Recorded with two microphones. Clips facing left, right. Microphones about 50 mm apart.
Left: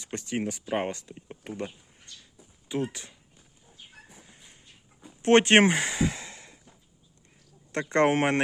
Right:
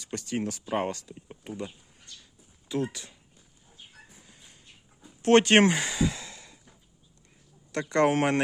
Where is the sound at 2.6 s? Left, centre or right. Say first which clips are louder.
Even; left.